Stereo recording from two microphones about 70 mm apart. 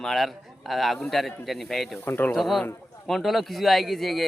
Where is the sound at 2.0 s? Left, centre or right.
Left.